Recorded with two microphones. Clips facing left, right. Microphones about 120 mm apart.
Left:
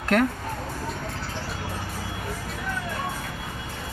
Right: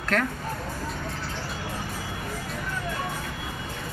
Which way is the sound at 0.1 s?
15° left (ahead or behind).